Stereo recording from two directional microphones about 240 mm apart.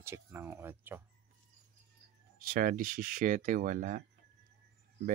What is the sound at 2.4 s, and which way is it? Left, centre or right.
Speech, right.